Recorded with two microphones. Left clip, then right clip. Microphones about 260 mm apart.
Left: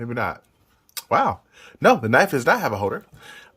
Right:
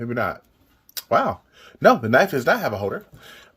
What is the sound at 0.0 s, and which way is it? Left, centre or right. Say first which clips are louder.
Speech: right 1 dB; centre.